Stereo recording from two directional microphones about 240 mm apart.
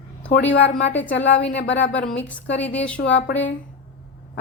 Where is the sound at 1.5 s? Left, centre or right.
Left.